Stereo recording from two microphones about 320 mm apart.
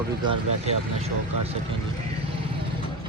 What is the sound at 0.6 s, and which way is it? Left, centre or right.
Speech, centre.